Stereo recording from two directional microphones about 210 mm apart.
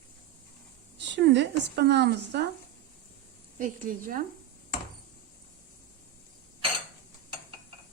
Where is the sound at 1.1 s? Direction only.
55° right (ahead or behind).